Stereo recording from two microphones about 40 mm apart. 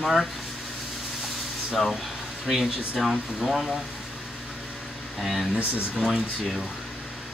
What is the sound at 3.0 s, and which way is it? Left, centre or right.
Speech, centre.